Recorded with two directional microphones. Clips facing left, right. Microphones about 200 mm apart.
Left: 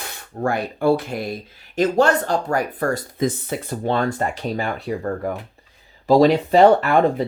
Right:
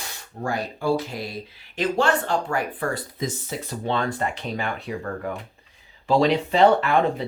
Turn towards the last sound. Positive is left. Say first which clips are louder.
# left 4 dB
turn(degrees=45)  # may be behind; listen again after turning